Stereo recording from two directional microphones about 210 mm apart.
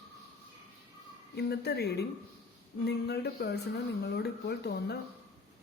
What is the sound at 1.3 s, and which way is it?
A man's voice, 50° left (ahead or behind).